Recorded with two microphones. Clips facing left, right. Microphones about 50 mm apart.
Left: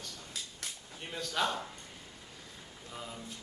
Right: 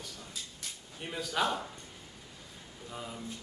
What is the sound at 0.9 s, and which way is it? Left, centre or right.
Speech, centre.